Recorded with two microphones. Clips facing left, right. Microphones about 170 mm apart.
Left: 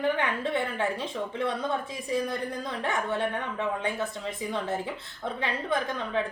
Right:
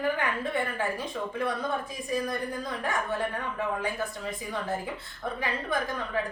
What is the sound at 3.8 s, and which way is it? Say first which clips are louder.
Speech: left 1 dB; 25° left (ahead or behind).